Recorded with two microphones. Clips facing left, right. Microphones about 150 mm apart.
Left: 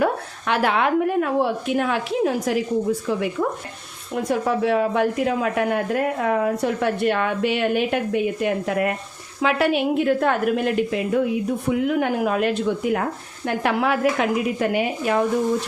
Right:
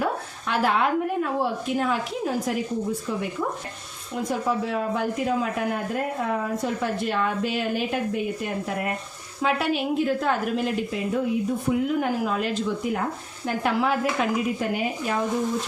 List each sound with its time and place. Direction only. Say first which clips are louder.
0.0 s speech: left 5 dB; 70° left (ahead or behind)
4.1 s a woman's voice: left 4 dB; 70° left (ahead or behind)
11.7 s a woman's voice: left 3 dB; 75° left (ahead or behind)